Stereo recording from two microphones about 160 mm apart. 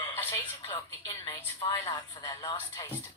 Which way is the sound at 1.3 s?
15° left (ahead or behind).